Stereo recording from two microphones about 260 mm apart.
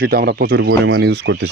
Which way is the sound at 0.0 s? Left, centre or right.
Right.